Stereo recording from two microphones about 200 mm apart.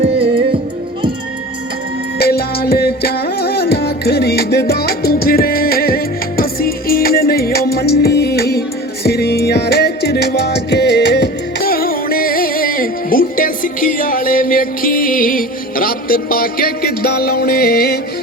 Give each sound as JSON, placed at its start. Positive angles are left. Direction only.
{"t": 0.0, "sound": "music", "side_deg": -30}
{"t": 2.1, "sound": "music", "side_deg": 50}